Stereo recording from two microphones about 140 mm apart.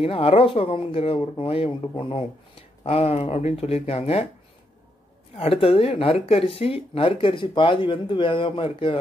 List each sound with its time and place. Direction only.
0.0 s speech: 45° left (ahead or behind)
5.4 s speech: 45° left (ahead or behind)